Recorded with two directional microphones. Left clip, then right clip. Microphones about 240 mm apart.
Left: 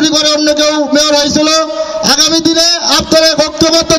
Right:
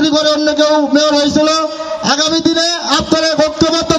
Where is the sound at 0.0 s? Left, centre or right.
Left.